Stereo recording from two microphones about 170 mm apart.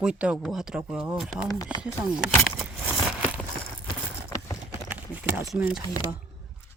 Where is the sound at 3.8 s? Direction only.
15° left (ahead or behind).